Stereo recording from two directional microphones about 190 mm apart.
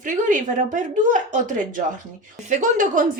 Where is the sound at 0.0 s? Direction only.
45° right (ahead or behind).